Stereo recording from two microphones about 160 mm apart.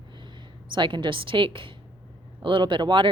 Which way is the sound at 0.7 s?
30° right (ahead or behind).